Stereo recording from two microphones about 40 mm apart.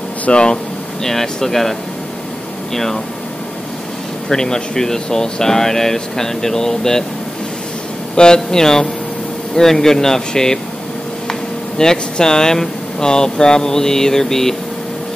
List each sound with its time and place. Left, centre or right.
0.3 s speech: left
1.0 s speech: centre
4.3 s speech: centre
8.2 s speech: centre
11.8 s speech: centre